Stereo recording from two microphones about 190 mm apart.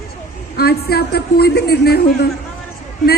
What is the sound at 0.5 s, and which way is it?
A woman's voice, 55° left (ahead or behind).